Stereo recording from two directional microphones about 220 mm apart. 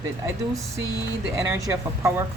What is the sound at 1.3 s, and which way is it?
Speech, 10° right (ahead or behind).